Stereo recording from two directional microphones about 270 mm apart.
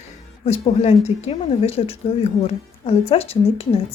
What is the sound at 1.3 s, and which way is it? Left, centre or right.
Speech, left.